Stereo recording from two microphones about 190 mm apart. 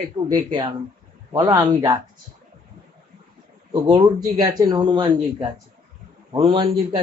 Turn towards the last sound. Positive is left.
turn(degrees=-25)  # may be behind; listen again after turning